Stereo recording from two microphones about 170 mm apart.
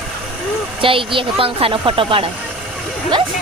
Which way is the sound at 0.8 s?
30° right (ahead or behind).